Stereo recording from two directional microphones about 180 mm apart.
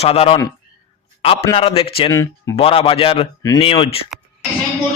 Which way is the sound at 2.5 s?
35° left (ahead or behind).